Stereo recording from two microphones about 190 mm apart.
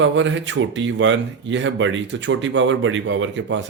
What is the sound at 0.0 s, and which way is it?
Speech, 80° right.